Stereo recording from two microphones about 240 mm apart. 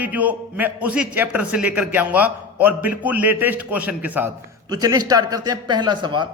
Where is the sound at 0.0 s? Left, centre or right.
Centre.